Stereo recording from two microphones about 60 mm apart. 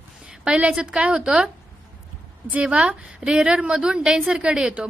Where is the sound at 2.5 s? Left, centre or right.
Right.